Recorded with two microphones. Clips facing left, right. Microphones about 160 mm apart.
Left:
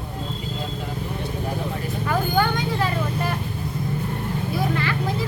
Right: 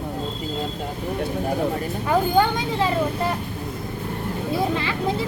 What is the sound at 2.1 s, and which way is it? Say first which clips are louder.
A child's voice: right 3 dB; 25° right (ahead or behind).